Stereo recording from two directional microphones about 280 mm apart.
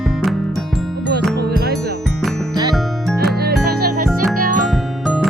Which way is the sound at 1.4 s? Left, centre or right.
Right.